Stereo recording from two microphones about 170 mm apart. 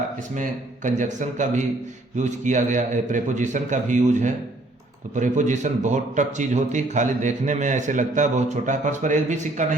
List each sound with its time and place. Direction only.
0.3 s a man's voice: 50° right (ahead or behind)